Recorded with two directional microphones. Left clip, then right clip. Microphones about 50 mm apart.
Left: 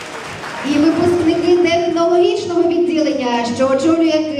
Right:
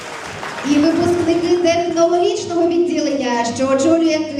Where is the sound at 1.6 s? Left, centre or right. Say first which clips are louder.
Even; right.